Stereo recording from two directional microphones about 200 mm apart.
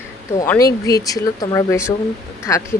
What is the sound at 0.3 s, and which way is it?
Speech, 15° left (ahead or behind).